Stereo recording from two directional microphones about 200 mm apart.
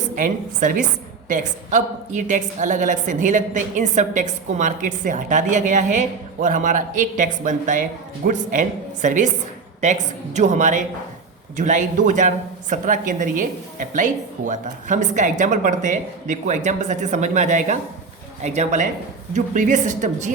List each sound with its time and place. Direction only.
0.2 s a woman's voice: 40° right (ahead or behind)